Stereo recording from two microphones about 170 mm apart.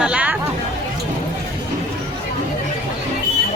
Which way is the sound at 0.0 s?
5° right (ahead or behind).